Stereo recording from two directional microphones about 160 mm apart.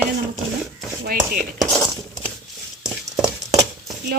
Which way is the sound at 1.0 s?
70° right (ahead or behind).